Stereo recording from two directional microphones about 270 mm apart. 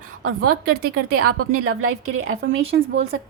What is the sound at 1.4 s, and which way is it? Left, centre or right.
A woman's voice, right.